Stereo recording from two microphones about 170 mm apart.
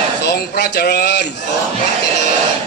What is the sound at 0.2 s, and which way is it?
Speech, 75° left (ahead or behind).